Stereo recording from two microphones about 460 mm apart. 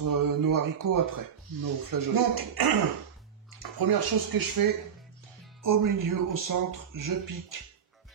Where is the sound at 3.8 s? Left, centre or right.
Right.